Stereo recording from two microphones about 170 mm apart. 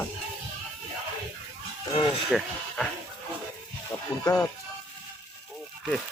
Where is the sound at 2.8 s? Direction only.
Centre (ahead or behind).